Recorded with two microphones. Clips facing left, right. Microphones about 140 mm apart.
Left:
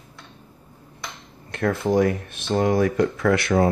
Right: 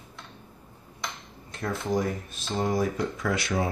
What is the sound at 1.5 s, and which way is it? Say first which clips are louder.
Speech: left 7 dB; 70° left (ahead or behind).